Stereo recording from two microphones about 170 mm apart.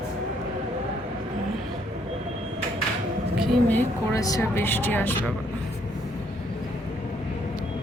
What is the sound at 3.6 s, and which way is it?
Speech, 10° left (ahead or behind).